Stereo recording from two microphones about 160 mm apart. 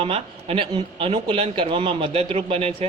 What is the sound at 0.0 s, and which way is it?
A man's voice, 35° right (ahead or behind).